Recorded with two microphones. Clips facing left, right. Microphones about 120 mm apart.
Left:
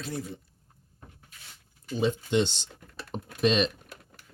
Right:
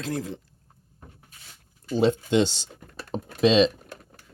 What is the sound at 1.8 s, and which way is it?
Speech, 80° right.